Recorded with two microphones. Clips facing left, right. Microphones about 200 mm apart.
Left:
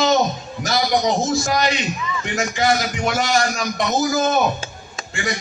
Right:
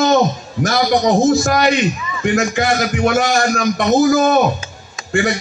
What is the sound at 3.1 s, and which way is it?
A man's voice, 50° right (ahead or behind).